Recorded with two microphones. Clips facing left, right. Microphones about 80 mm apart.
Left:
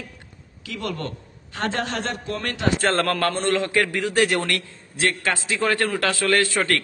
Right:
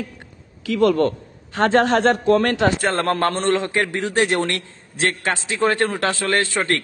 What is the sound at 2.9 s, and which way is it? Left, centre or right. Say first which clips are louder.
Speech: right 2 dB; right.